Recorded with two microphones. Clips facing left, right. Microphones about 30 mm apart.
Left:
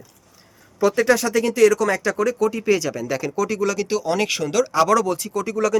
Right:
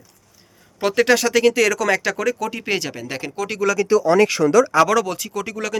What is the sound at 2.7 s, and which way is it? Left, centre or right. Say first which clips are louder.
Speech: left 2 dB; right.